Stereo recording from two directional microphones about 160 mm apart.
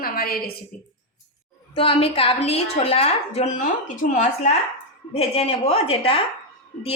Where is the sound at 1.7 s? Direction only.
35° left (ahead or behind); by 4.5 s 50° left (ahead or behind).